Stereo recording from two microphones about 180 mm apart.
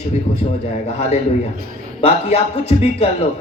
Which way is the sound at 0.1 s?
40° left (ahead or behind).